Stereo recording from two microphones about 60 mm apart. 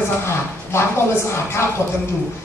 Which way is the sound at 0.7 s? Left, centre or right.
Left.